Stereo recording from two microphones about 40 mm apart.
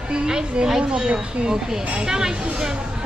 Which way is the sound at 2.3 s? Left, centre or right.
Right.